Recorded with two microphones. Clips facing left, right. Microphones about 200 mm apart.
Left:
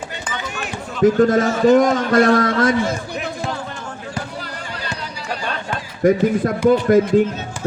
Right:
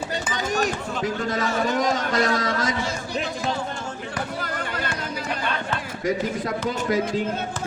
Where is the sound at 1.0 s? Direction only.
50° left (ahead or behind).